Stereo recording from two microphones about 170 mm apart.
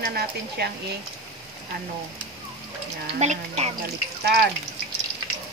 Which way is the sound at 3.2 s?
40° right (ahead or behind).